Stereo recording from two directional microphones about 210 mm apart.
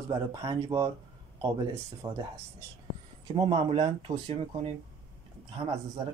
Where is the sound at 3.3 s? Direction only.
25° right (ahead or behind).